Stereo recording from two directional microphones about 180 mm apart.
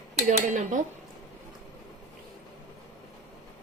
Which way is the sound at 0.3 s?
45° right (ahead or behind).